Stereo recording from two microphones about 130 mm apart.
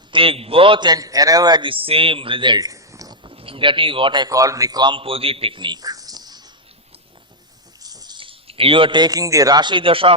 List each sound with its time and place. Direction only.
0.1 s a man's voice: 45° right (ahead or behind); by 3.2 s 25° right (ahead or behind)
3.2 s a man's voice: 45° right (ahead or behind)
7.8 s speech: 30° right (ahead or behind)